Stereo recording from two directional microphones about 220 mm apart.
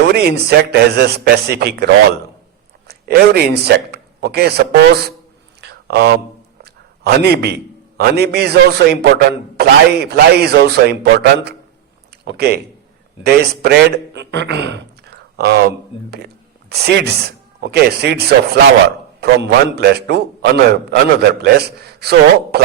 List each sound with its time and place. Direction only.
0.1 s a man's voice: 45° right (ahead or behind)
5.5 s a sound: 50° right (ahead or behind)
6.6 s a man's voice: 45° right (ahead or behind)